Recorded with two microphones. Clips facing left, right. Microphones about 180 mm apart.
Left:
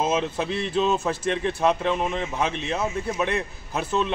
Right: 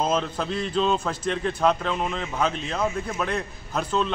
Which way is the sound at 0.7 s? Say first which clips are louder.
Left 1 dB; 5° left (ahead or behind).